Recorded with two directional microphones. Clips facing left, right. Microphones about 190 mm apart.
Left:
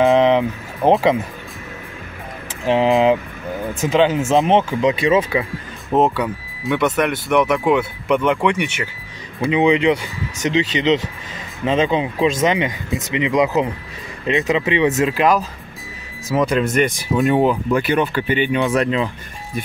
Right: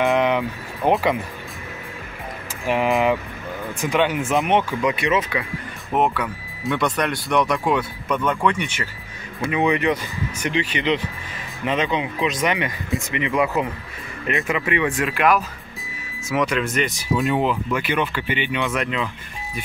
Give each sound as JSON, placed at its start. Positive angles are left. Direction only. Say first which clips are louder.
{"t": 0.2, "sound": "vehicle", "louder": "left 5 dB", "side_deg": 30}
{"t": 2.6, "sound": "speech", "louder": "left 5 dB", "side_deg": 25}
{"t": 6.6, "sound": "speech", "louder": "left 4 dB", "side_deg": 5}
{"t": 8.1, "sound": "speech", "louder": "left 4 dB", "side_deg": 20}